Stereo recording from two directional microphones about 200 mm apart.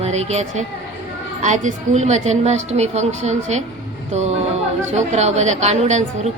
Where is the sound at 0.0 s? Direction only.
35° right (ahead or behind).